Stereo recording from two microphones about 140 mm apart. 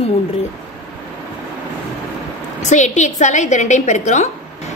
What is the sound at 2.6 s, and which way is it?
A woman's voice, 60° left (ahead or behind).